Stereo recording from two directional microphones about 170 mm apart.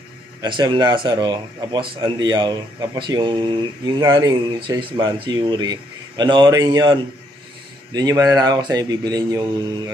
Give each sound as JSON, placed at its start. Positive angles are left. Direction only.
{"t": 0.4, "sound": "speech", "side_deg": -25}